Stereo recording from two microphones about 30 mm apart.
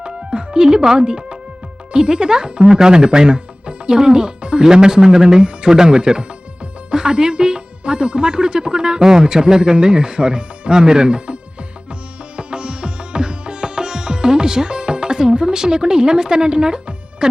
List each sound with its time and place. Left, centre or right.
0.0 s music: right
1.9 s speech: right
12.4 s music: right